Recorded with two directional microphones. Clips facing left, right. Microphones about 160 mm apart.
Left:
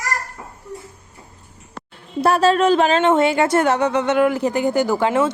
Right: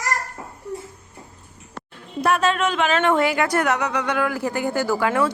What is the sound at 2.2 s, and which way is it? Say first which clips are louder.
A woman's voice: left 5 dB; 30° left (ahead or behind).